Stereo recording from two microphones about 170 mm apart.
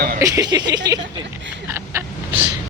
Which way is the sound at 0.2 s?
20° right (ahead or behind).